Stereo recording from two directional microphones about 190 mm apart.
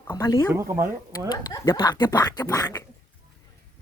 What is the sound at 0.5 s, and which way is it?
Speech, 15° right (ahead or behind).